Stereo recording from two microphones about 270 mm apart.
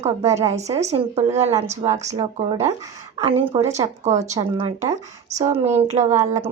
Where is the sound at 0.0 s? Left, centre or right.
Right.